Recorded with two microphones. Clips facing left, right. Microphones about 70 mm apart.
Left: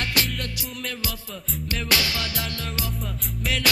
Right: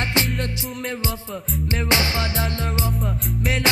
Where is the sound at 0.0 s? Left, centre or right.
Right.